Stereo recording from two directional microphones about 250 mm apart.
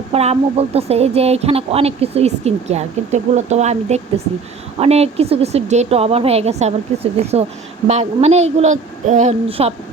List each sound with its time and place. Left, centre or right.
0.1 s speech: right